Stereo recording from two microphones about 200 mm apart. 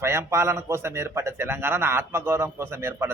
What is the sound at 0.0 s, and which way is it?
A man's voice, 15° right (ahead or behind).